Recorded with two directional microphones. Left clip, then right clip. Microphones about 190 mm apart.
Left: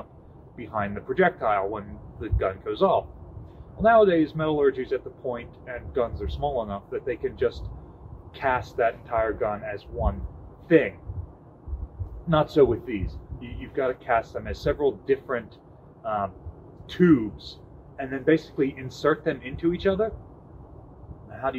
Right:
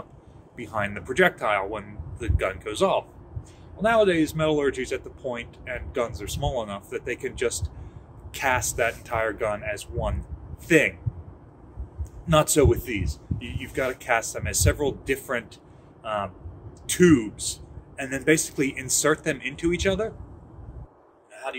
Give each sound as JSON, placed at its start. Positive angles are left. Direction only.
{"t": 0.6, "sound": "speech", "side_deg": -30}
{"t": 12.3, "sound": "a man's voice", "side_deg": -25}